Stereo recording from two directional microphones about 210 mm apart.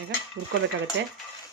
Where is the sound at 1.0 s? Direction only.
60° right (ahead or behind).